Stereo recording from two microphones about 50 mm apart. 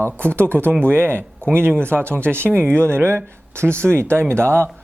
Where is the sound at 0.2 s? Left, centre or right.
Right.